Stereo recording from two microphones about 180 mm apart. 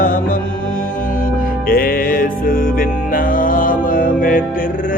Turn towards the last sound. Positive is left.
turn(degrees=50)  # may be behind; listen again after turning